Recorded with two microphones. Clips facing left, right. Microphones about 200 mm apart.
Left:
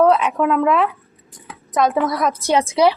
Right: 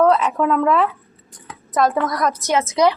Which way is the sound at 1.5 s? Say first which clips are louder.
Even; centre (ahead or behind).